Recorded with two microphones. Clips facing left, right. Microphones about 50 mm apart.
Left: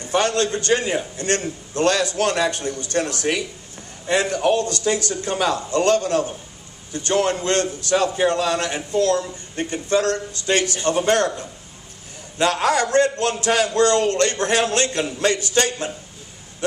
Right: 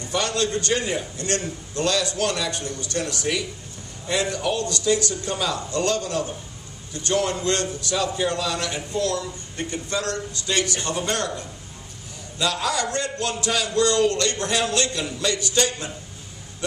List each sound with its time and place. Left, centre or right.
0.0 s a man's voice: left